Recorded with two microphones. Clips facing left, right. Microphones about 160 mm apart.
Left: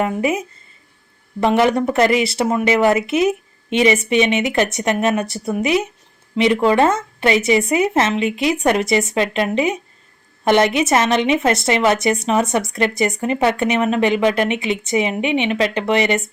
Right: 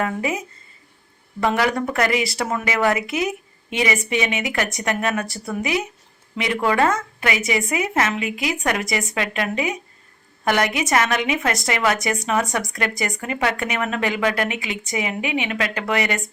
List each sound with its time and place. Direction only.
0.0 s speech: 20° left (ahead or behind)